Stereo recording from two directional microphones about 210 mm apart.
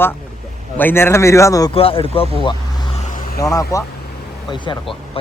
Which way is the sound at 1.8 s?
25° left (ahead or behind).